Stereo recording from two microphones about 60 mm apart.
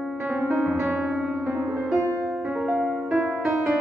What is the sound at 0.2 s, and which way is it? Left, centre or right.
Music, right.